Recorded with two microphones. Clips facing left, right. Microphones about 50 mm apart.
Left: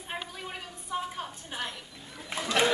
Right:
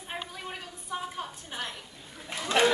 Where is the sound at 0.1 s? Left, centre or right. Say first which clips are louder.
Even; centre.